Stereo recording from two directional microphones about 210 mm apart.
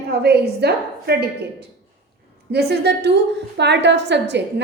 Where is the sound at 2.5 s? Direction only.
50° right (ahead or behind).